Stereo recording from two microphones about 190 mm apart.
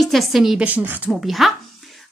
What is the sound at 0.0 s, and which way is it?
A woman's voice, centre (ahead or behind).